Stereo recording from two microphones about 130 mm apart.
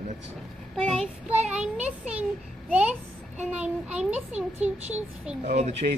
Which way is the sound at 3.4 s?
10° right (ahead or behind).